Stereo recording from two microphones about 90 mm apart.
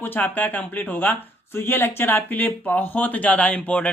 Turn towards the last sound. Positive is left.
turn(degrees=15)  # may be behind; listen again after turning